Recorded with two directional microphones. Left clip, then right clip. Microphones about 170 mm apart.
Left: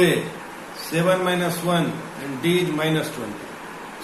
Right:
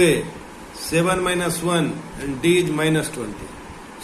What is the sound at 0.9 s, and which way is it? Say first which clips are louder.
A man's voice: even; 55° right (ahead or behind).